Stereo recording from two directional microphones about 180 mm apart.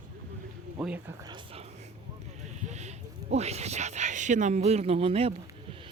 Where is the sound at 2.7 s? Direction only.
40° right (ahead or behind).